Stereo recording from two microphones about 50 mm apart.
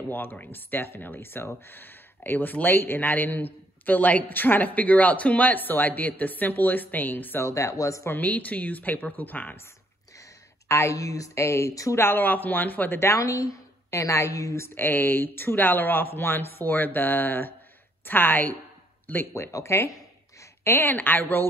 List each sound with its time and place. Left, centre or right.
0.1 s speech: left
7.4 s speech: left
8.1 s speech: left
10.7 s a woman's voice: left
12.0 s speech: left
13.0 s a woman's voice: left
14.8 s speech: left
19.3 s speech: left
20.8 s speech: left